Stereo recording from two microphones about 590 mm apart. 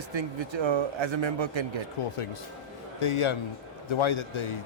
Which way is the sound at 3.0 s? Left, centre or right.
Left.